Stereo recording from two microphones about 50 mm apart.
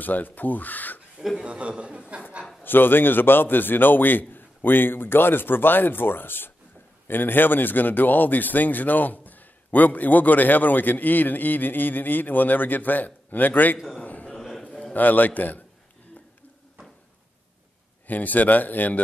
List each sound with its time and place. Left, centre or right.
0.0 s speech: left
1.4 s a man's voice: right
2.6 s a man's voice: left
14.0 s a sound: left
14.3 s a sound: centre
15.0 s speech: left
18.0 s speech: left